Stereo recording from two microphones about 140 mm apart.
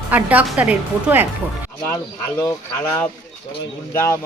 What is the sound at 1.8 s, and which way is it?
Speech, 20° left (ahead or behind).